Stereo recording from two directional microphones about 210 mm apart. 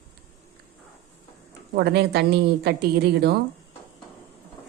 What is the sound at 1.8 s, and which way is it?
Speech, 50° right (ahead or behind).